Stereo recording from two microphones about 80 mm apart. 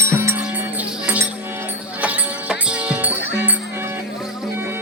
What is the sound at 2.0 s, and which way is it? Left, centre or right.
Music, centre.